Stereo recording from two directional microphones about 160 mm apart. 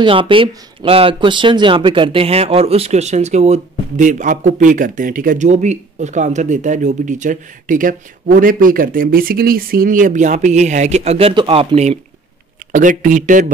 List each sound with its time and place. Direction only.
0.0 s speech: 35° right (ahead or behind)
12.7 s speech: 55° right (ahead or behind)